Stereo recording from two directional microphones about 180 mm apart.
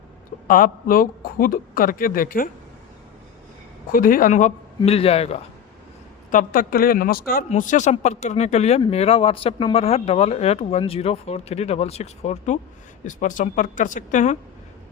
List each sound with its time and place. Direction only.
0.4 s speech: 50° left (ahead or behind)
3.9 s speech: 50° left (ahead or behind); by 5.4 s 35° left (ahead or behind)
6.3 s speech: 50° left (ahead or behind)
7.5 s speech: 45° left (ahead or behind)